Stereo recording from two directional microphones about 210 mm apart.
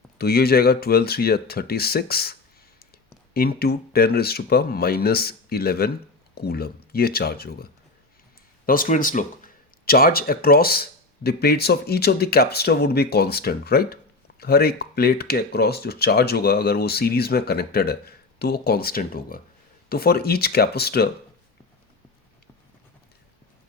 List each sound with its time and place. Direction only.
0.2 s speech: 50° left (ahead or behind)
3.3 s speech: 45° left (ahead or behind)